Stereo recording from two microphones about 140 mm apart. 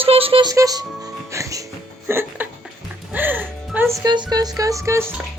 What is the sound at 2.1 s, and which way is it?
Speech, 15° right (ahead or behind).